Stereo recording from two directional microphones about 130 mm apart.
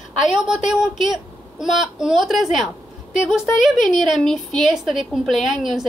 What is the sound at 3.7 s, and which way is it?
A woman's voice, centre (ahead or behind).